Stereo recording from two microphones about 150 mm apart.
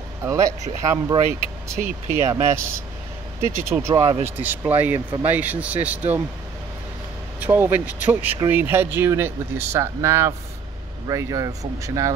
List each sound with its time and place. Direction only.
0.2 s speech: 20° right (ahead or behind)
1.8 s speech: 60° right (ahead or behind)
2.2 s speech: 20° right (ahead or behind)
7.3 s speech: 15° right (ahead or behind)